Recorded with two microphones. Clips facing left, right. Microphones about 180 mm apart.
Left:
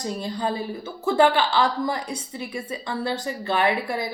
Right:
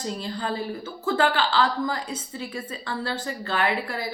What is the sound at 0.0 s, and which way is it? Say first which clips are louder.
A woman's voice: left 3 dB; 15° left (ahead or behind).